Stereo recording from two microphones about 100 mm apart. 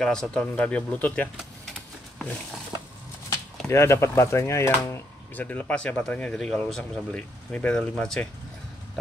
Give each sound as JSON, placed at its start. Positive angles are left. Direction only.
{"t": 0.0, "sound": "speech", "side_deg": 5}
{"t": 3.3, "sound": "speech", "side_deg": 30}